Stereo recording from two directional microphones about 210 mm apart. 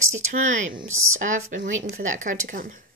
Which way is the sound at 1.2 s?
35° right (ahead or behind).